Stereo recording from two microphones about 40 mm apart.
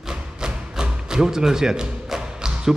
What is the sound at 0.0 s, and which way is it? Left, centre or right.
A man's voice, centre.